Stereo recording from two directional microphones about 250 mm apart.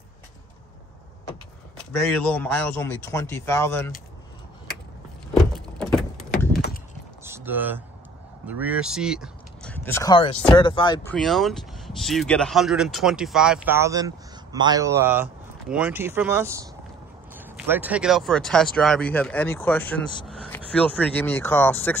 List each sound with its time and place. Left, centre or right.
1.8 s speech: centre
5.3 s vehicle: centre
7.2 s a sound: centre
8.5 s speech: centre
11.1 s speech: centre